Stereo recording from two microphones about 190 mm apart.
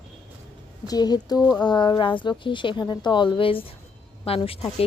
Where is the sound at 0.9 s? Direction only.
20° left (ahead or behind).